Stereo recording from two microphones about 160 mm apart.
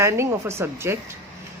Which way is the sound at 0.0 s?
15° right (ahead or behind).